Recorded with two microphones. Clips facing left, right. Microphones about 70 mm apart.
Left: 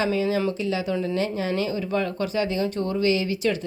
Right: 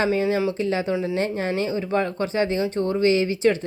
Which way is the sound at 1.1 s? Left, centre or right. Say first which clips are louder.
Right 1 dB; right.